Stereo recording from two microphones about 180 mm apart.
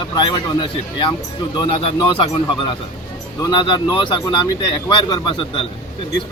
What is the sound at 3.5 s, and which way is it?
Speech, 25° left (ahead or behind).